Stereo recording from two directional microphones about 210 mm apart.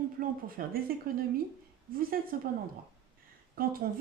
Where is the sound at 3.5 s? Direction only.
45° right (ahead or behind).